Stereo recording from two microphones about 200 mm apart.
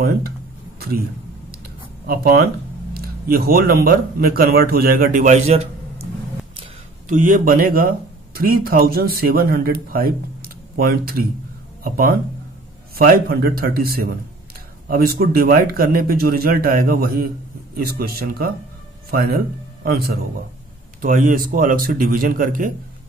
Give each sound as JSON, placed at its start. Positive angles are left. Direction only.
{"t": 0.7, "sound": "a sound", "side_deg": -50}
{"t": 2.0, "sound": "speech", "side_deg": -50}
{"t": 7.1, "sound": "speech", "side_deg": -40}